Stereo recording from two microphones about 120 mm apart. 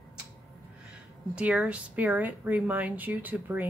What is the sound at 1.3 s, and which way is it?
Speech, 10° right (ahead or behind).